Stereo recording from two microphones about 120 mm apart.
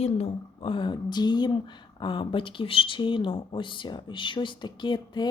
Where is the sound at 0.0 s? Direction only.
55° left (ahead or behind).